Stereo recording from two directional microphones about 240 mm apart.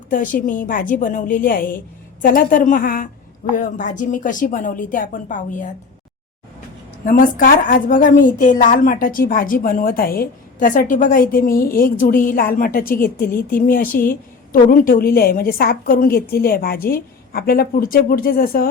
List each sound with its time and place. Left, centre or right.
0.1 s a woman's voice: left
7.0 s a woman's voice: left